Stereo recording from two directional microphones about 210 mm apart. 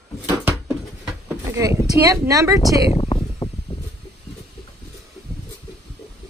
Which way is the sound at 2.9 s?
25° left (ahead or behind).